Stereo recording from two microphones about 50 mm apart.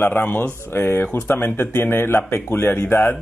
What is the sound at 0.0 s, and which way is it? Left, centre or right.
Speech, left.